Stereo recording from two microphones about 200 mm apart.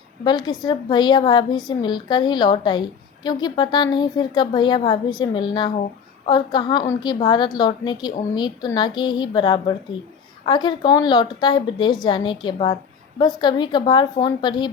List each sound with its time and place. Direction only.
0.3 s a woman's voice: 20° left (ahead or behind)